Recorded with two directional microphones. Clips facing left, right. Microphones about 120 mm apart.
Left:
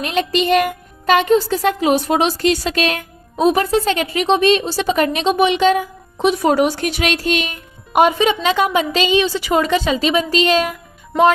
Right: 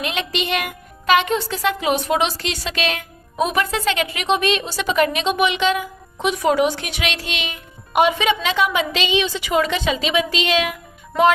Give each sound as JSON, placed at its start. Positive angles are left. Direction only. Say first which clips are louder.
{"t": 0.0, "sound": "speech", "louder": "left 6 dB", "side_deg": 40}
{"t": 3.3, "sound": "speech", "louder": "left 6 dB", "side_deg": 35}